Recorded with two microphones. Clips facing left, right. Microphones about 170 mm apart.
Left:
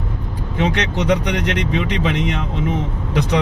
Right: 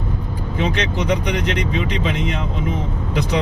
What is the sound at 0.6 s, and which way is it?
Speech, 65° left (ahead or behind).